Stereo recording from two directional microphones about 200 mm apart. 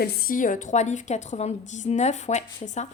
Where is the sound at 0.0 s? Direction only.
45° left (ahead or behind).